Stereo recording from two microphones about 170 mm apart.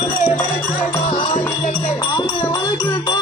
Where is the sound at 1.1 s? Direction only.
25° left (ahead or behind).